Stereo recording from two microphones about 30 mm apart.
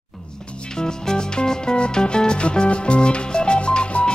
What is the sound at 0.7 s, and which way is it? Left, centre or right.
Music, left.